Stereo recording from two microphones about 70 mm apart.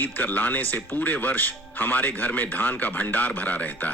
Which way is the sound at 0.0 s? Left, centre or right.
Left.